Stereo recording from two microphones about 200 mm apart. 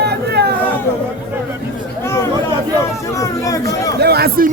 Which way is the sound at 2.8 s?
15° left (ahead or behind).